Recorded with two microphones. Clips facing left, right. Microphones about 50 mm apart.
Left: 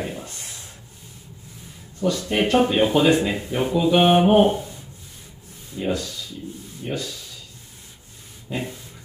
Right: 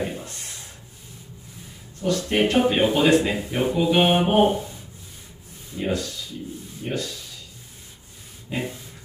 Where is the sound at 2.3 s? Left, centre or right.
Centre.